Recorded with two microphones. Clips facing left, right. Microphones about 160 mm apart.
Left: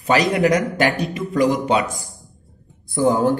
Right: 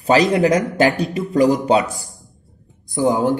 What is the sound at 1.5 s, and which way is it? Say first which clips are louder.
Speech: right 3 dB; 40° right (ahead or behind).